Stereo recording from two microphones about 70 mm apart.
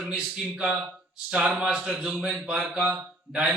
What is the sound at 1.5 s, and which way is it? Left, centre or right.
A man's voice, centre.